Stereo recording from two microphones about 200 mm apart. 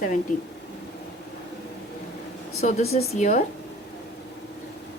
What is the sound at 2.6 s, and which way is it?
Speech, 35° left (ahead or behind).